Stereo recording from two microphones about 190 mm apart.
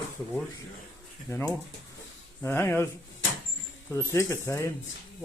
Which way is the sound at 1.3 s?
15° left (ahead or behind).